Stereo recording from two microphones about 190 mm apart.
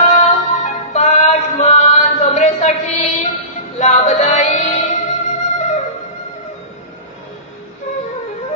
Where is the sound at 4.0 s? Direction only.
35° left (ahead or behind).